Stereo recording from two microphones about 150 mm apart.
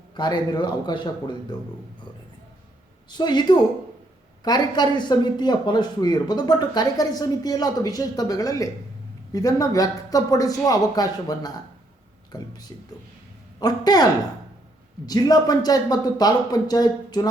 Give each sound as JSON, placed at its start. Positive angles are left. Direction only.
{"t": 0.2, "sound": "speech", "side_deg": 30}
{"t": 3.1, "sound": "speech", "side_deg": 30}